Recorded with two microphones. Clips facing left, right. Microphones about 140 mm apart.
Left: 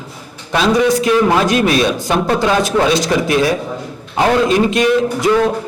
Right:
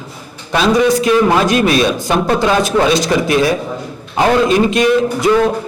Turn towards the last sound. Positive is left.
turn(degrees=-25)  # may be behind; listen again after turning